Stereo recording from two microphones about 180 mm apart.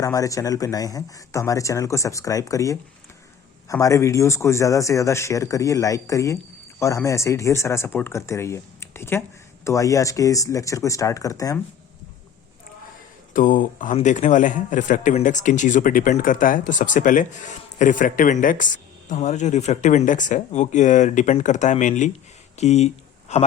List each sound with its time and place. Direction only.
0.0 s speech: 20° left (ahead or behind)
13.3 s a man's voice: 50° left (ahead or behind)